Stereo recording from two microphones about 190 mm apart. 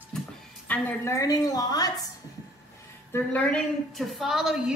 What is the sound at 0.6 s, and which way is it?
A woman's voice, 10° left (ahead or behind).